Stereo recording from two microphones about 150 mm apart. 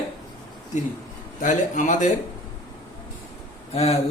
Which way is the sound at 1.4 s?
55° left (ahead or behind).